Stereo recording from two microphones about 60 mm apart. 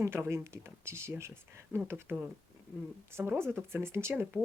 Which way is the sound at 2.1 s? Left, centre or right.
Right.